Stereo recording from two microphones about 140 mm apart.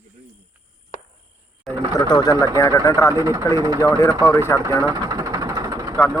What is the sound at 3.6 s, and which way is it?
Speech, 25° right (ahead or behind).